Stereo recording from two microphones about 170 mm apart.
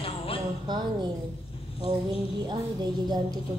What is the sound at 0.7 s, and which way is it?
Speech, 25° right (ahead or behind).